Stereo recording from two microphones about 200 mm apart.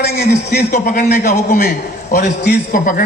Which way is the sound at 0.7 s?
45° left (ahead or behind).